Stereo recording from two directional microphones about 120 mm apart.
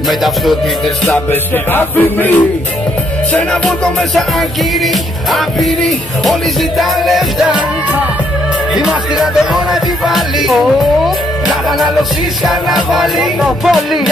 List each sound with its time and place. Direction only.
1.1 s music: 15° left (ahead or behind)
5.3 s music: centre (ahead or behind)
8.7 s music: 5° right (ahead or behind)
11.4 s music: centre (ahead or behind)